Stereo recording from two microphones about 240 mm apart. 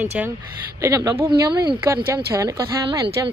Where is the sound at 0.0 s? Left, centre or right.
Centre.